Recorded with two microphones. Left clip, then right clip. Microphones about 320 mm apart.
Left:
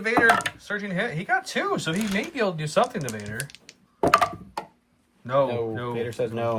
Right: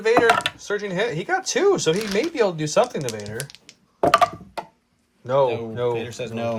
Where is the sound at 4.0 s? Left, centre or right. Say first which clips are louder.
Right 3 dB; centre.